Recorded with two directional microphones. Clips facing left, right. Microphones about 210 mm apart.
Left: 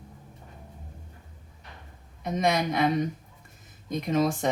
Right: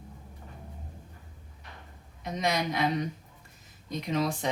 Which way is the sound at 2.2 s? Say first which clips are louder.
Left 4 dB; 50° left (ahead or behind).